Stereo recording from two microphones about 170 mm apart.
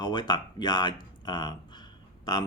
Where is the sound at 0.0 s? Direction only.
25° left (ahead or behind).